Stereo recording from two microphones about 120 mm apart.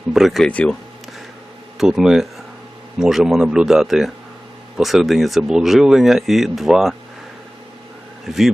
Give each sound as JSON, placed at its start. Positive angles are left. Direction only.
{"t": 0.1, "sound": "speech", "side_deg": 0}
{"t": 1.8, "sound": "speech", "side_deg": -5}
{"t": 8.3, "sound": "speech", "side_deg": 0}